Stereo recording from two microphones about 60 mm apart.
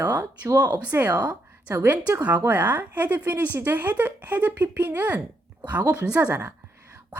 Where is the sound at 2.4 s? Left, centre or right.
Right.